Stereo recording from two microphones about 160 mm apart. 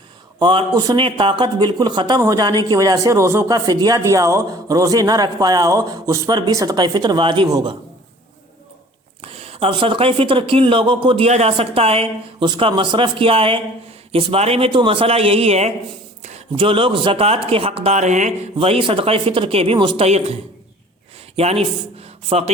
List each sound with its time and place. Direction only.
0.3 s speech: 30° right (ahead or behind)
9.2 s speech: 40° right (ahead or behind)
20.1 s a man's voice: 40° right (ahead or behind)